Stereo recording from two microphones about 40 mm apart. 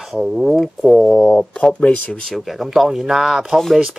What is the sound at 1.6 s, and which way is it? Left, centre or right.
Speech, left.